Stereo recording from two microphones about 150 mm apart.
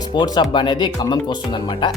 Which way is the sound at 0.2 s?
30° left (ahead or behind).